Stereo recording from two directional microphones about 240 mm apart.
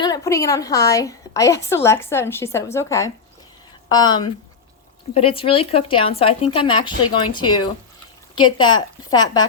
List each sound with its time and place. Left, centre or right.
0.0 s a woman's voice: centre